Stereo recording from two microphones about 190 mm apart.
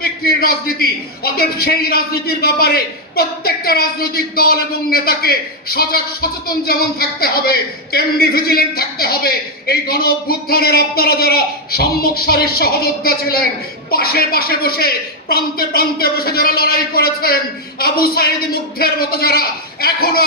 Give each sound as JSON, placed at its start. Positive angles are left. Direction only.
{"t": 0.0, "sound": "a man's voice", "side_deg": 55}